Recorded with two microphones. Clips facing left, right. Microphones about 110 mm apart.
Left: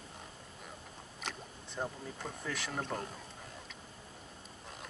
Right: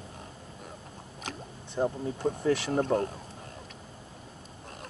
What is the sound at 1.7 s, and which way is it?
Speech, 30° right (ahead or behind).